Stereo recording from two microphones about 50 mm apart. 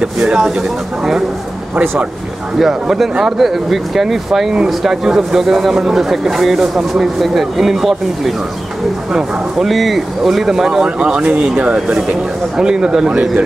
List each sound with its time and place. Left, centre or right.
0.0 s speech: centre
2.6 s speech: centre
9.7 s speech: centre
11.0 s speech: right
12.5 s speech: centre